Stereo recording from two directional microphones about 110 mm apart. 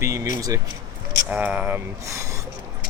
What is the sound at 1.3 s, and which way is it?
Speech, 15° right (ahead or behind).